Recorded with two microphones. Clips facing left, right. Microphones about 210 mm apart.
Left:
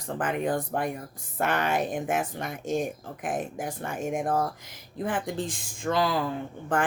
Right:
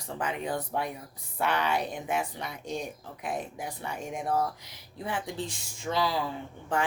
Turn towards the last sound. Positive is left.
turn(degrees=55)  # may be behind; listen again after turning